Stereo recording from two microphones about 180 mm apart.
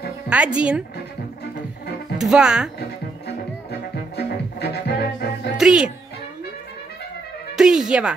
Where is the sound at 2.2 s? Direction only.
5° right (ahead or behind).